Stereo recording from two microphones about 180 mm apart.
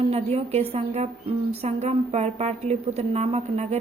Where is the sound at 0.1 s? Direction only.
35° right (ahead or behind).